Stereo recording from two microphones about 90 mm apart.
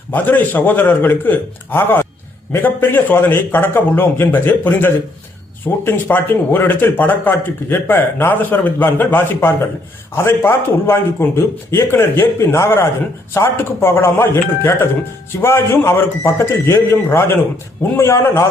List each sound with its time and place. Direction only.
0.1 s speech: 20° left (ahead or behind)